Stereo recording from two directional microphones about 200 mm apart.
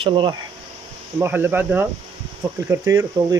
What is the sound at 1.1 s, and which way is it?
Speech, 10° right (ahead or behind).